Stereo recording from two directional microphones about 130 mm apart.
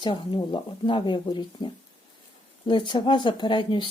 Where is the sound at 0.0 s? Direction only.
35° left (ahead or behind).